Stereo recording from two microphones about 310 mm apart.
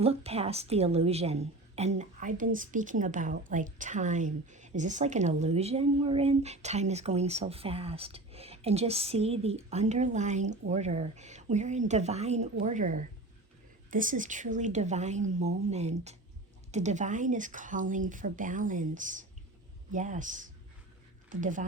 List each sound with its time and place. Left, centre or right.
0.0 s a woman's voice: centre